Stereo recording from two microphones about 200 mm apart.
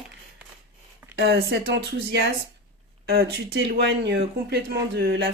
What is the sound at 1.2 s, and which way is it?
Speech, 55° right (ahead or behind).